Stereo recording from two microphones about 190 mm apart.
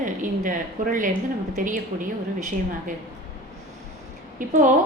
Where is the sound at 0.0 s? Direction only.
45° right (ahead or behind).